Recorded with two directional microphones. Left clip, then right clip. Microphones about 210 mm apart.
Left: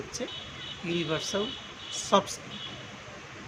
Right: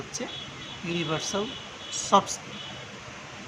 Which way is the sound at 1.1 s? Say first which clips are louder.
Right 1 dB; 10° right (ahead or behind).